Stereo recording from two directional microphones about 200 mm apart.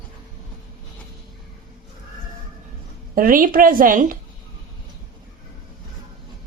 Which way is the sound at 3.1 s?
45° right (ahead or behind).